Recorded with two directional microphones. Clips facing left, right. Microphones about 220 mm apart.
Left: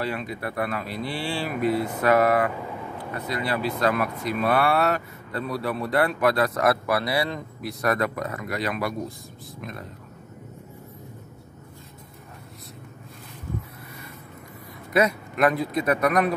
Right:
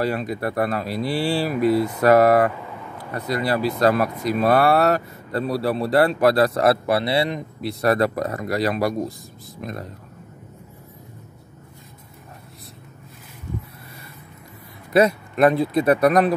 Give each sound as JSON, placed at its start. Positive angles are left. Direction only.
{"t": 0.0, "sound": "speech", "side_deg": -40}
{"t": 14.9, "sound": "speech", "side_deg": -30}